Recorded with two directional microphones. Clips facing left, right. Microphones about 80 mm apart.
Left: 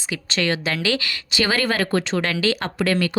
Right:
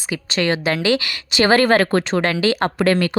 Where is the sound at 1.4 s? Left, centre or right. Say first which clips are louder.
Right 7 dB; right.